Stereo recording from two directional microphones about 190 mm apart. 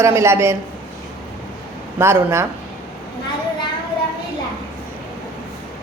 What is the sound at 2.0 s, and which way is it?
Speech, 15° right (ahead or behind).